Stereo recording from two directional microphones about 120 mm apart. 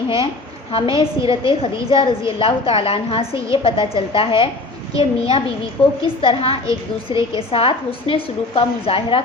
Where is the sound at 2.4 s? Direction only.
50° left (ahead or behind).